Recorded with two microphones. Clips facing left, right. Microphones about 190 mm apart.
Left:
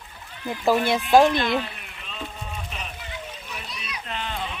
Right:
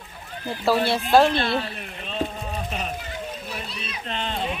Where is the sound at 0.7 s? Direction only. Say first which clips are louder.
Left 1 dB; 15° left (ahead or behind).